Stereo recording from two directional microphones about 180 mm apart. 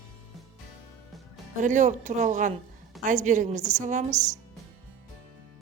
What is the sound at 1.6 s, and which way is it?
A woman's voice, 45° right (ahead or behind).